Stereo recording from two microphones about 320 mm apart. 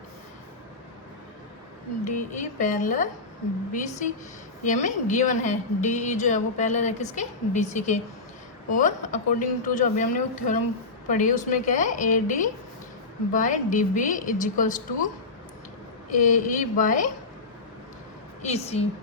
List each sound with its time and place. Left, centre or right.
2.0 s a woman's voice: left
16.1 s a woman's voice: left
18.4 s a woman's voice: centre